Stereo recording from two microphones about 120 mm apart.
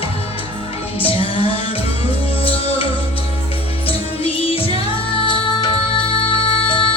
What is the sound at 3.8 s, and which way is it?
Music, 50° left (ahead or behind).